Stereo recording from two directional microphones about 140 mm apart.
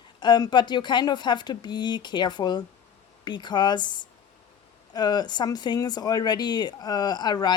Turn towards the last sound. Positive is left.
turn(degrees=30)  # may be behind; listen again after turning